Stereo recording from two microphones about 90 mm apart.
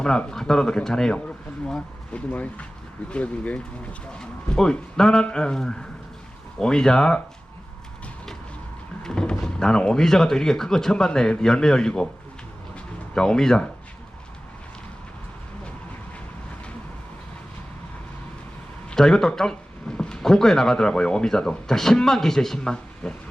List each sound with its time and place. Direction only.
0.0 s speech: 10° left (ahead or behind)
9.0 s speech: 5° left (ahead or behind)
13.1 s speech: 5° left (ahead or behind)
18.9 s speech: 10° left (ahead or behind)